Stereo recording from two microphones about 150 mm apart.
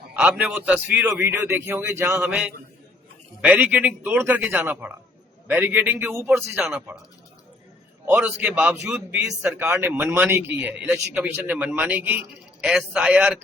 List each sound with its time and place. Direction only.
0.2 s speech: 10° right (ahead or behind)
3.4 s speech: 10° right (ahead or behind)
8.0 s speech: 10° right (ahead or behind)